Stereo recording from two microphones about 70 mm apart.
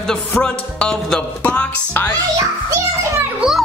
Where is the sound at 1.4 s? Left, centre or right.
Centre.